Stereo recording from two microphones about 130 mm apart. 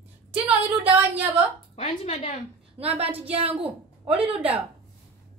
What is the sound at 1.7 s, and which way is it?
Speech, 50° left (ahead or behind).